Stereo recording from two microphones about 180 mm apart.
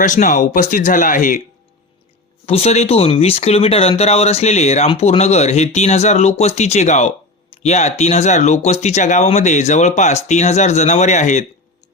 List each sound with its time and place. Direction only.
0.0 s speech: 45° left (ahead or behind)
2.5 s speech: 35° left (ahead or behind)